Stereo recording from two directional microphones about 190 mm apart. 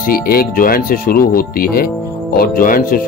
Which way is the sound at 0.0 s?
50° left (ahead or behind).